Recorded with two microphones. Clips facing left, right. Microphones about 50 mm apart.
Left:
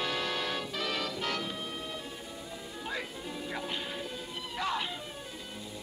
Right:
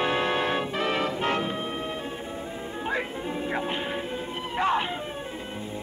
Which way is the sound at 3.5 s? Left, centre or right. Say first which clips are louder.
Right 7 dB; right.